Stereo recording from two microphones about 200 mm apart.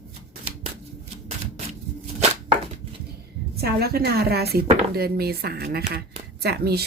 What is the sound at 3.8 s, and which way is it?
Speech, 50° right (ahead or behind).